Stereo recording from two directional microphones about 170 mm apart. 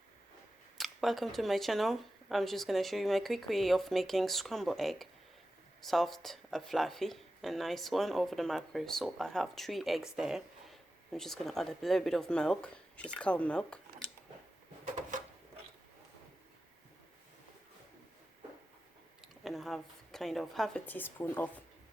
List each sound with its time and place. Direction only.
0.8 s speech: centre (ahead or behind)
19.4 s a woman's voice: centre (ahead or behind)